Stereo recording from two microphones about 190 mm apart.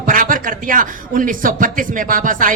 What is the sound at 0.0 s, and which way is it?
Speech, 45° right (ahead or behind).